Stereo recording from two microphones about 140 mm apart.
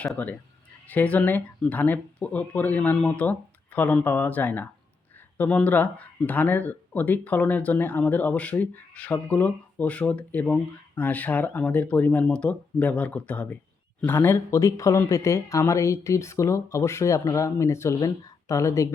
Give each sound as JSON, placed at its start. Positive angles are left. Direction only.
{"t": 0.0, "sound": "speech", "side_deg": 10}